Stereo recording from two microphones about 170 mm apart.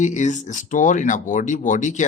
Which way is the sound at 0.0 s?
45° left (ahead or behind).